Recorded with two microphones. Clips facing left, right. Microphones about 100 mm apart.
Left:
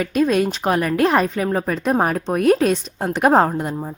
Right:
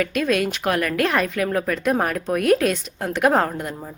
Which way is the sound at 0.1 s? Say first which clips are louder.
Left 4 dB; 40° left (ahead or behind).